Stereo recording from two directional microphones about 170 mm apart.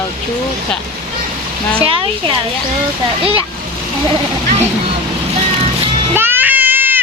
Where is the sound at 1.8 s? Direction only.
30° right (ahead or behind).